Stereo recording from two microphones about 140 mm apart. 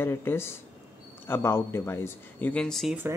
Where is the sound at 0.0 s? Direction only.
15° left (ahead or behind).